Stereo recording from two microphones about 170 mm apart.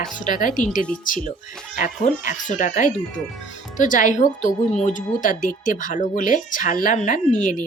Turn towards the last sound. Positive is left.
turn(degrees=50)  # may be behind; listen again after turning